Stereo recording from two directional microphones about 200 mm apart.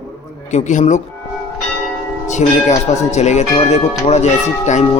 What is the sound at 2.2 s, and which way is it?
Speech, 35° left (ahead or behind).